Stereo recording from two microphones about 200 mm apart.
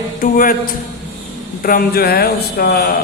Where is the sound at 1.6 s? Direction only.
45° left (ahead or behind).